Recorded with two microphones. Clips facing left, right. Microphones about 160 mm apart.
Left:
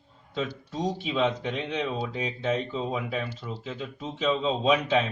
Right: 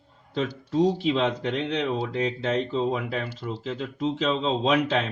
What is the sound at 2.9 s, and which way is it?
Speech, 70° right (ahead or behind).